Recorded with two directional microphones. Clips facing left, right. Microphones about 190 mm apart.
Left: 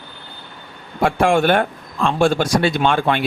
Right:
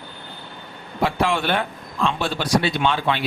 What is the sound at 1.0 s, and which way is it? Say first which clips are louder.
Speech: left 6 dB; 50° left (ahead or behind).